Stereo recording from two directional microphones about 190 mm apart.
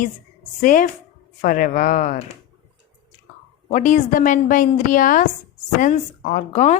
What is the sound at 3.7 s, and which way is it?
A woman's voice, 40° left (ahead or behind).